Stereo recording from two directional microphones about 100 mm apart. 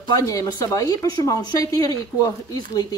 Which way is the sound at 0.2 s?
35° left (ahead or behind).